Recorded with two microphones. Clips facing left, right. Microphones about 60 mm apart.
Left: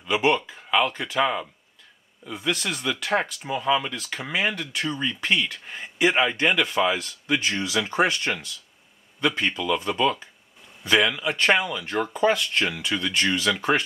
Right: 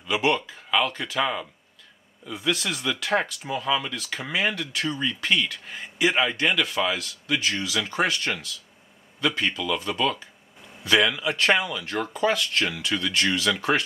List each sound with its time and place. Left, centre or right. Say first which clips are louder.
0.0 s speech: left 2 dB; centre
10.8 s speech: even; centre